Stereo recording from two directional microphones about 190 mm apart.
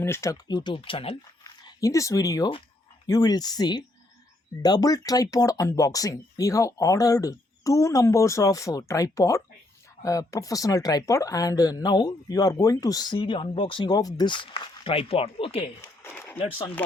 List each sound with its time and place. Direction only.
0.0 s speech: 15° left (ahead or behind); by 1.1 s 30° left (ahead or behind)
1.5 s speech: 20° left (ahead or behind)
15.8 s a sound: 10° left (ahead or behind)